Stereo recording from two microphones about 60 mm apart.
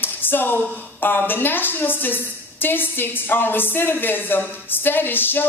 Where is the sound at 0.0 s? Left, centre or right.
Left.